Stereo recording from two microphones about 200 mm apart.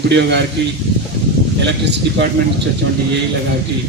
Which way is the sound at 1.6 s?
60° right (ahead or behind).